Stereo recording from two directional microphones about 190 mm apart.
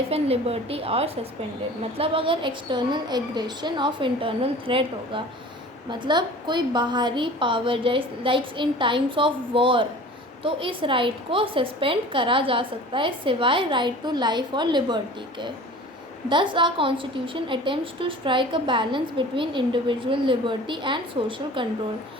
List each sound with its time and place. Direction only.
0.1 s a woman's voice: 30° right (ahead or behind)